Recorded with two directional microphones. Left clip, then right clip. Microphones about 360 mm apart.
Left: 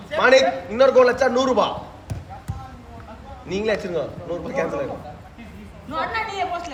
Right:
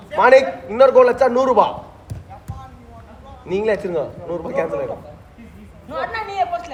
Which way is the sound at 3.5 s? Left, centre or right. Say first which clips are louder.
Right 4 dB; right.